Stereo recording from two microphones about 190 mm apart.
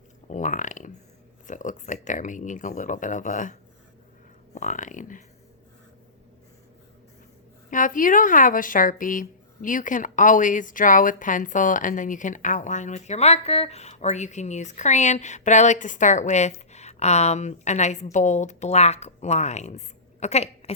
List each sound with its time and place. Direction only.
0.3 s a sound: 40° left (ahead or behind)
1.5 s speech: 40° left (ahead or behind)
7.7 s speech: 45° left (ahead or behind)